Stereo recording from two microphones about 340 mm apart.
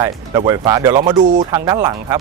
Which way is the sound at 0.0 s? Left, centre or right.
Centre.